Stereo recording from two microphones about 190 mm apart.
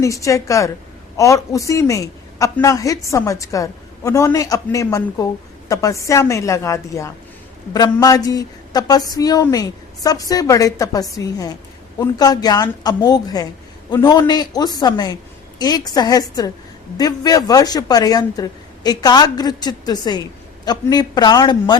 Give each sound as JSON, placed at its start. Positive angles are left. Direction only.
{"t": 0.0, "sound": "a woman's voice", "side_deg": 15}